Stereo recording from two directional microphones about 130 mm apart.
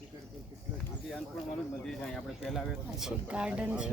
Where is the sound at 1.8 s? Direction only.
5° left (ahead or behind).